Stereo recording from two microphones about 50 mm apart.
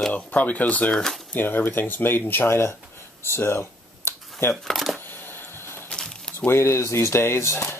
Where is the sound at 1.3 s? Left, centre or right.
Left.